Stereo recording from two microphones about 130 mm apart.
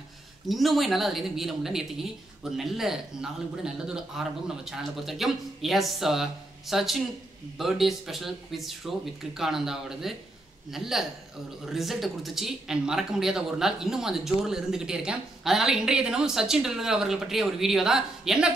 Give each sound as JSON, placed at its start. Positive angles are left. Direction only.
{"t": 0.5, "sound": "speech", "side_deg": 0}